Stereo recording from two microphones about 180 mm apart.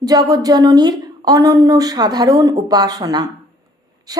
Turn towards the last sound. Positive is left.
turn(degrees=-20)  # may be behind; listen again after turning